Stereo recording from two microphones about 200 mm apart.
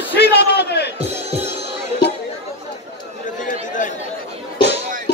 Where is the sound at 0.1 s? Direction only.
55° left (ahead or behind).